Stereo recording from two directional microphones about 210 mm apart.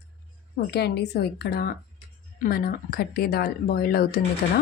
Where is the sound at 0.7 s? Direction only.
50° left (ahead or behind).